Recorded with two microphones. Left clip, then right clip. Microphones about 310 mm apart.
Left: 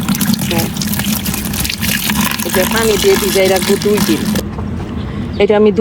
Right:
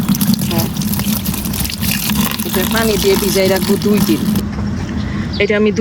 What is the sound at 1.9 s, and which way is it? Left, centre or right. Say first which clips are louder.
Speech: left 2 dB; centre.